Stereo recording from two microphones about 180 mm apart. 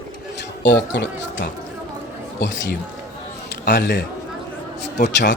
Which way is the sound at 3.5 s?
70° left (ahead or behind).